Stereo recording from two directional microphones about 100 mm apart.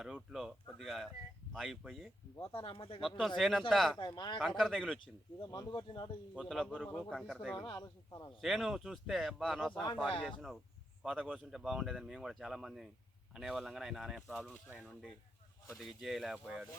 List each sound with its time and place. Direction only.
0.0 s speech: 5° right (ahead or behind)
2.4 s speech: 60° left (ahead or behind)
3.0 s speech: centre (ahead or behind)
3.9 s speech: 45° left (ahead or behind)
4.4 s speech: 5° right (ahead or behind)
5.4 s speech: 45° left (ahead or behind)
6.3 s speech: centre (ahead or behind)
7.8 s a man's voice: 35° left (ahead or behind)
8.4 s speech: 5° right (ahead or behind)
11.0 s speech: 10° right (ahead or behind)
14.7 s speech: 15° right (ahead or behind)
15.8 s speech: centre (ahead or behind)